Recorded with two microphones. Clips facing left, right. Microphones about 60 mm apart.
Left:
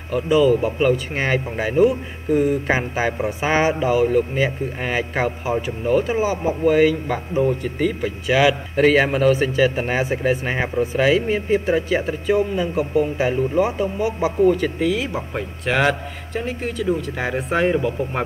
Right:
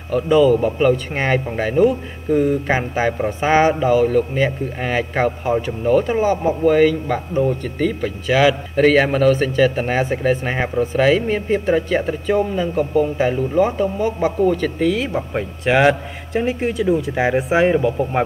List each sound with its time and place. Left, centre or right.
0.1 s speech: centre
17.4 s speech: centre